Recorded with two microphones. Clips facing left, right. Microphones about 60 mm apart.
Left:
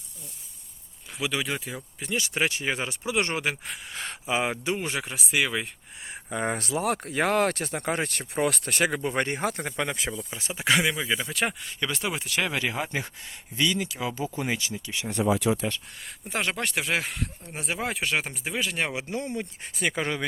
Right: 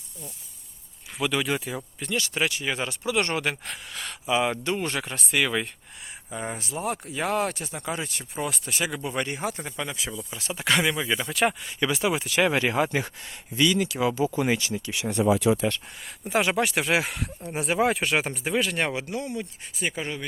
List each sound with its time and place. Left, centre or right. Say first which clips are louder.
1.2 s speech: right 3 dB; centre
2.0 s speech: even; centre
3.9 s speech: right 3 dB; left
4.5 s speech: right 1 dB; centre
6.3 s speech: left 4 dB; left
10.5 s speech: even; centre
12.7 s speech: right 6 dB; right
16.2 s speech: right 6 dB; centre
18.9 s speech: even; left
19.7 s speech: left 2 dB; left